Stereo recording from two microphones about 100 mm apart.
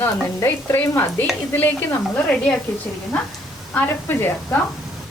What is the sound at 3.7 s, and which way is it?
Stir, 20° left (ahead or behind).